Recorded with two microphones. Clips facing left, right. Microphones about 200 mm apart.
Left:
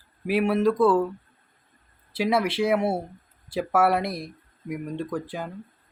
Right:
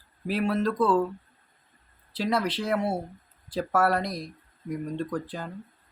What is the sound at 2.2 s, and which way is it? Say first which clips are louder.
Speech: left 4 dB; 10° left (ahead or behind).